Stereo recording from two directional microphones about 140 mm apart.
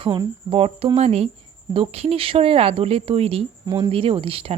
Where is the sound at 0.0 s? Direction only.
35° right (ahead or behind).